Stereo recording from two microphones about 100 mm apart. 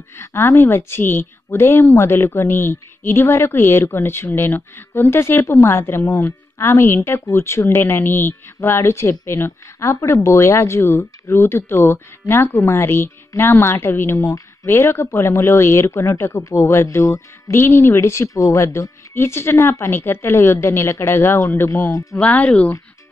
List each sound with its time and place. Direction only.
0.1 s speech: 25° left (ahead or behind)
22.2 s speech: 15° left (ahead or behind)